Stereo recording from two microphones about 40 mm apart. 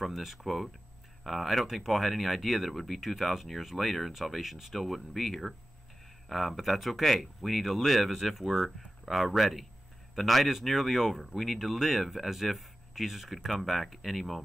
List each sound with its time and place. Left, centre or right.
0.0 s speech: centre